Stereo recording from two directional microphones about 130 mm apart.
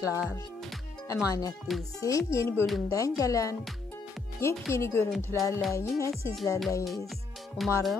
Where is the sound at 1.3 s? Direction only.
30° left (ahead or behind).